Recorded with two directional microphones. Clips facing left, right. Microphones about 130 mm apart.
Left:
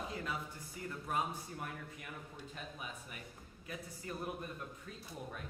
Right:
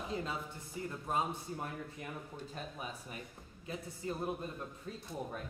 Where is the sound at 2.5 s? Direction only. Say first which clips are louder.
Right 3 dB; 35° right (ahead or behind).